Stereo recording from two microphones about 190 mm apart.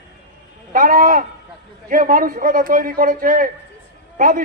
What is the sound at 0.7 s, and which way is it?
A man's voice, 45° right (ahead or behind).